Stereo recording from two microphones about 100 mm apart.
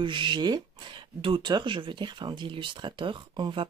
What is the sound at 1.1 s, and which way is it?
Speech, 60° right (ahead or behind).